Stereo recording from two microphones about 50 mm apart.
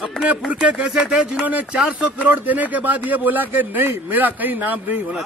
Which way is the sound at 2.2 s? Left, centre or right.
Right.